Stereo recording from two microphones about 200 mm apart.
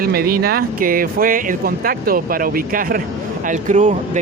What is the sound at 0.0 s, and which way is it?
Speech, 50° right (ahead or behind).